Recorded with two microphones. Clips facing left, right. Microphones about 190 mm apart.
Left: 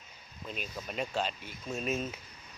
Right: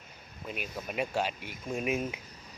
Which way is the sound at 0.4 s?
10° right (ahead or behind).